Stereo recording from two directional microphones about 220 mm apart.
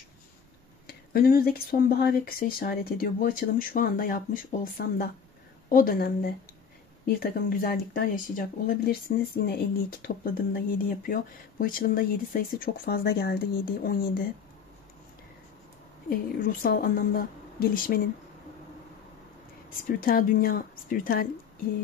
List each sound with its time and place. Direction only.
0.8 s speech: 45° left (ahead or behind)
16.1 s speech: 40° left (ahead or behind)
19.9 s speech: 40° left (ahead or behind)